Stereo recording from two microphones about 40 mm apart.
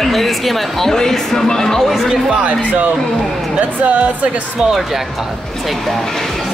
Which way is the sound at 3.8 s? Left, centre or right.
Right.